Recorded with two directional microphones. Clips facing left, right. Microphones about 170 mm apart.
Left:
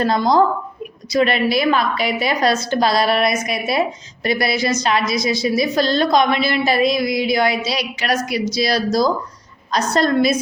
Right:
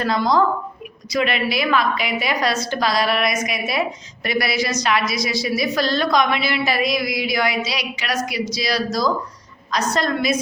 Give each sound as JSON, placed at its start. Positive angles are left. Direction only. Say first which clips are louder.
{"t": 0.0, "sound": "a woman's voice", "louder": "left 3 dB", "side_deg": 25}
{"t": 7.9, "sound": "a woman's voice", "louder": "left 6 dB", "side_deg": 50}
{"t": 8.5, "sound": "a woman's voice", "louder": "left 6 dB", "side_deg": 30}